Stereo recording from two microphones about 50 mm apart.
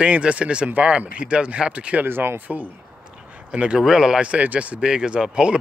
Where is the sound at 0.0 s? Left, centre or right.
Right.